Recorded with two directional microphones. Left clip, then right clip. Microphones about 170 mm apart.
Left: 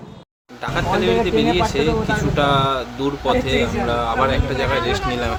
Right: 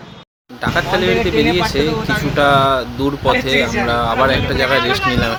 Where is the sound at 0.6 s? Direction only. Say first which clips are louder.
Right 4 dB; 25° right (ahead or behind).